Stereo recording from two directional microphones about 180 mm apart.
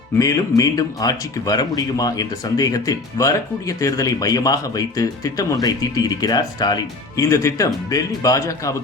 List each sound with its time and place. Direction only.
0.2 s speech: 20° left (ahead or behind)